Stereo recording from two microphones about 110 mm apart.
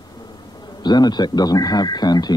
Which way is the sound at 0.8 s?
40° left (ahead or behind).